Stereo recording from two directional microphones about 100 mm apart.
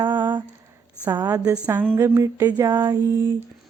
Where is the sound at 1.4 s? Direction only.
10° right (ahead or behind).